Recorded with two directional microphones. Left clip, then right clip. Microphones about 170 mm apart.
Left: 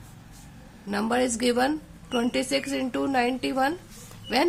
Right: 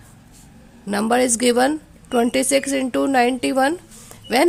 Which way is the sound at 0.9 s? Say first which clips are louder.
Right 7 dB; 50° right (ahead or behind).